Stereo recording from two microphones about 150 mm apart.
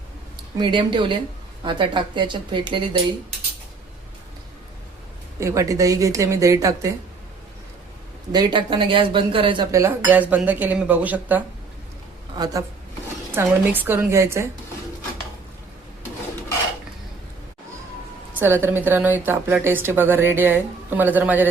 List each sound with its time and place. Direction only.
0.5 s speech: 30° right (ahead or behind)
5.4 s speech: 20° right (ahead or behind)
8.3 s speech: 30° right (ahead or behind)
9.7 s a woman's voice: 15° right (ahead or behind)
13.3 s a woman's voice: 15° right (ahead or behind)
18.3 s a woman's voice: 15° right (ahead or behind)